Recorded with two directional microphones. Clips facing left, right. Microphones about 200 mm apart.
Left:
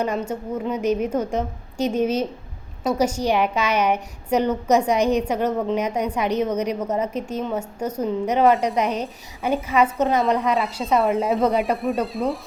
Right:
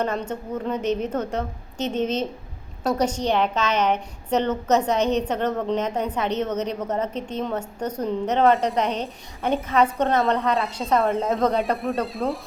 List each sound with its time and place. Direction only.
0.0 s a woman's voice: 10° left (ahead or behind)
9.4 s a woman's voice: centre (ahead or behind)
10.5 s speech: centre (ahead or behind)